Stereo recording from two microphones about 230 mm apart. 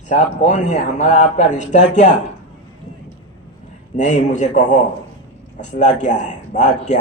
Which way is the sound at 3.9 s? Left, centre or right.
Left.